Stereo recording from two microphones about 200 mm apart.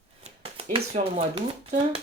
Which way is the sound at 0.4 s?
30° right (ahead or behind).